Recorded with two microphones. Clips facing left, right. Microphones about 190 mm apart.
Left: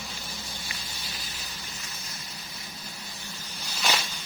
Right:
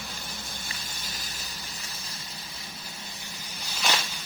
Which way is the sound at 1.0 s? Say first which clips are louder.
Even; 45° right (ahead or behind).